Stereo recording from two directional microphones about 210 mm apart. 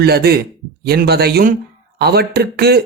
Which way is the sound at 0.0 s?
50° right (ahead or behind).